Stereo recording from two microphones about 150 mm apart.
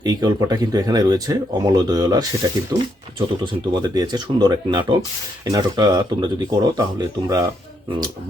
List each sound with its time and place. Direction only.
0.0 s speech: 25° right (ahead or behind)